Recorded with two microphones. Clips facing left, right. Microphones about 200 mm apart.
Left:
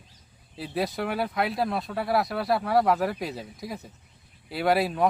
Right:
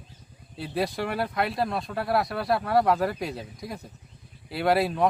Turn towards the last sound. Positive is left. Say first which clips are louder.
# even
turn(degrees=0)  # may be behind; listen again after turning